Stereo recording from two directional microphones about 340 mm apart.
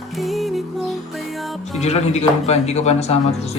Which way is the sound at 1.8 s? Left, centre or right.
Centre.